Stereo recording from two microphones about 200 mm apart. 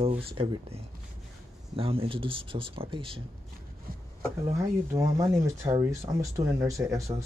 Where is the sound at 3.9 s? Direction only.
45° right (ahead or behind).